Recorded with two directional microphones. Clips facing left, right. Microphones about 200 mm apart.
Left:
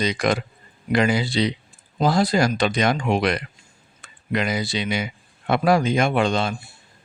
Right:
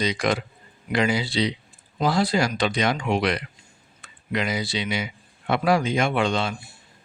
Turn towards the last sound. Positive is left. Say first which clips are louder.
# left 2 dB
turn(degrees=45)  # may be behind; listen again after turning